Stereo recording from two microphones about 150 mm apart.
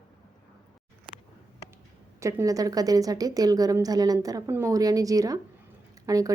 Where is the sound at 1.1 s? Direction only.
35° right (ahead or behind).